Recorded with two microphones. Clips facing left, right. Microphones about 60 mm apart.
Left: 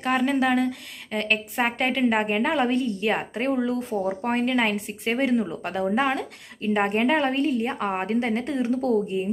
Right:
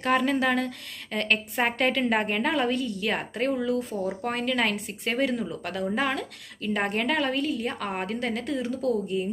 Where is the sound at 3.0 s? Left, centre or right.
Centre.